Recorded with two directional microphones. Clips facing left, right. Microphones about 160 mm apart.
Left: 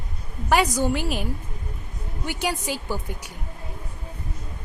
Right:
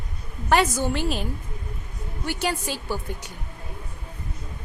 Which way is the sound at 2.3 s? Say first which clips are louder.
Even; 15° left (ahead or behind).